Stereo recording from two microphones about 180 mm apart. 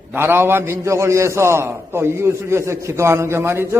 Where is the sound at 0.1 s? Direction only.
10° right (ahead or behind).